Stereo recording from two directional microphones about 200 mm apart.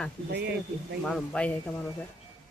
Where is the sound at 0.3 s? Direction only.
55° right (ahead or behind).